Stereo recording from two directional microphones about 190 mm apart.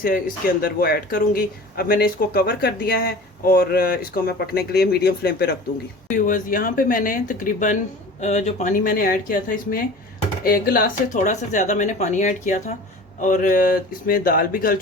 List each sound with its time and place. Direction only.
0.0 s speech: 50° left (ahead or behind)
6.1 s speech: 45° left (ahead or behind)